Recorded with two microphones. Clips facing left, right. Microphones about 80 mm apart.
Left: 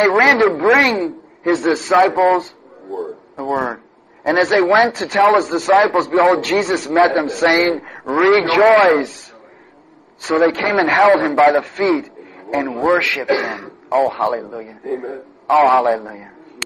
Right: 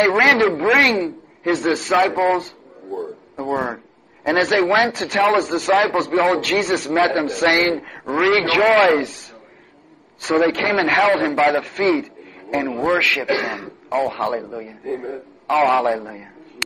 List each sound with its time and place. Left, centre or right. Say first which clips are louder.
0.1 s a man's voice: left 3 dB; centre
2.9 s a sound: left 2 dB; centre
4.4 s a man's voice: left 4 dB; centre
10.2 s a man's voice: left 2 dB; centre
13.8 s a man's voice: left 5 dB; centre; by 16.3 s left